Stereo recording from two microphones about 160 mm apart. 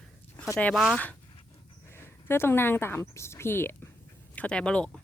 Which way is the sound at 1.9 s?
15° left (ahead or behind).